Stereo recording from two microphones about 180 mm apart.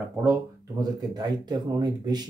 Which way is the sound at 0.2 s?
20° right (ahead or behind).